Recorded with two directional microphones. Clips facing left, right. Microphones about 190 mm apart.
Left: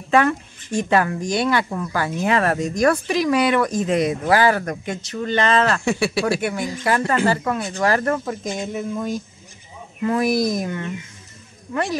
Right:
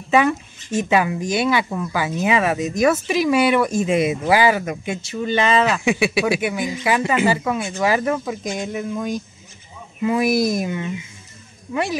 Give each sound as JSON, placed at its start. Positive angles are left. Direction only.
{"t": 0.1, "sound": "speech", "side_deg": -5}
{"t": 7.2, "sound": "speech", "side_deg": -5}